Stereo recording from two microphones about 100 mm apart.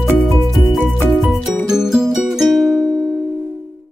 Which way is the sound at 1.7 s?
5° right (ahead or behind).